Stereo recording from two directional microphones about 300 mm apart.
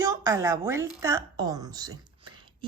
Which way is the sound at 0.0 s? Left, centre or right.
Centre.